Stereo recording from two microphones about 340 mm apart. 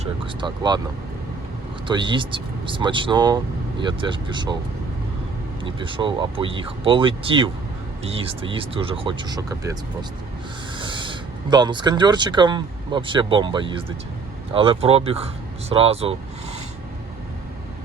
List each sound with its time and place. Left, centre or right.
0.0 s speech: centre
1.9 s speech: centre
5.6 s speech: centre
10.8 s speech: centre